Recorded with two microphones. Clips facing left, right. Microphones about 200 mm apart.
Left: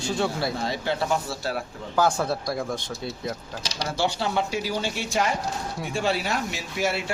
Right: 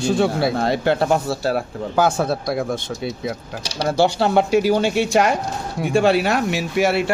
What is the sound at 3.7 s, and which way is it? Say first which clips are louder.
A man's voice: right 9 dB; 65° right (ahead or behind).